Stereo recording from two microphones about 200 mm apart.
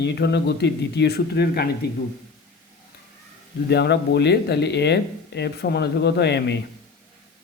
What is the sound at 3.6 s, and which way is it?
Speech, 55° left (ahead or behind).